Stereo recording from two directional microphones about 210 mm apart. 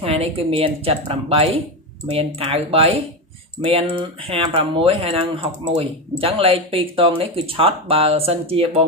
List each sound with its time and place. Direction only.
0.0 s speech: 30° right (ahead or behind)